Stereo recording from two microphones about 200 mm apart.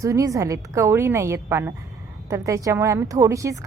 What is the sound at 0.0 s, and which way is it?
A woman's voice, 15° right (ahead or behind).